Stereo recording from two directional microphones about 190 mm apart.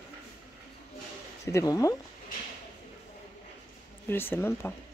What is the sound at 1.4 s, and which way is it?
Speech, 15° left (ahead or behind).